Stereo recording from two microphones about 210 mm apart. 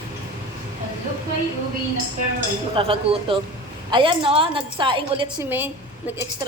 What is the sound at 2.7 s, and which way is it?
A woman's voice, 25° right (ahead or behind).